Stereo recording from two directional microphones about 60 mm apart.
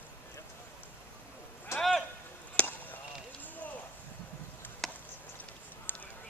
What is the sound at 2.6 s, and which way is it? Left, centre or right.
Basketball bounce, centre.